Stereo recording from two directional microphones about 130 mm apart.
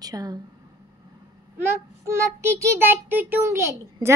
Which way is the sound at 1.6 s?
20° right (ahead or behind).